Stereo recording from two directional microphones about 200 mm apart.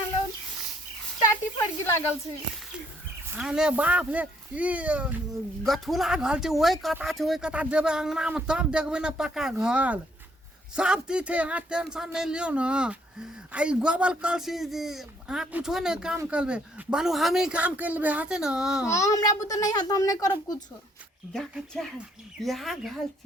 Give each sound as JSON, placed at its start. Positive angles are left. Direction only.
{"t": 1.8, "sound": "a child's voice", "side_deg": 10}
{"t": 3.2, "sound": "speech", "side_deg": -5}
{"t": 18.9, "sound": "a child's voice", "side_deg": 15}
{"t": 21.3, "sound": "speech", "side_deg": 0}